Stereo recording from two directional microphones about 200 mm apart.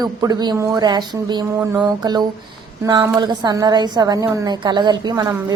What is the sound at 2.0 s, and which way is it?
A woman's voice, 20° right (ahead or behind).